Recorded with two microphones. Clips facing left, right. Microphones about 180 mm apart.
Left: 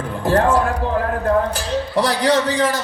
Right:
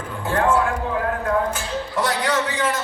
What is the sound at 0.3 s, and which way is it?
Speech, 40° left (ahead or behind).